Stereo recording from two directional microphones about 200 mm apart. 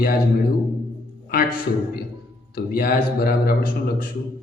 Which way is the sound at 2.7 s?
45° left (ahead or behind).